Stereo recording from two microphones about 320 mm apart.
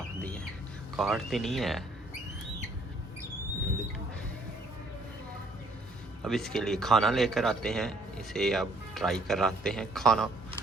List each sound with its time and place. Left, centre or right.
0.2 s bird: centre
0.9 s speech: centre
6.2 s speech: centre